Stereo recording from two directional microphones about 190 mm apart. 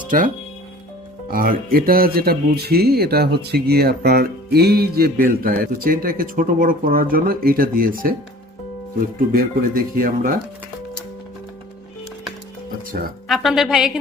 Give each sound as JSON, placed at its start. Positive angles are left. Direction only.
{"t": 1.3, "sound": "speech", "side_deg": -45}
{"t": 9.1, "sound": "speech", "side_deg": -50}
{"t": 13.2, "sound": "a woman's voice", "side_deg": 0}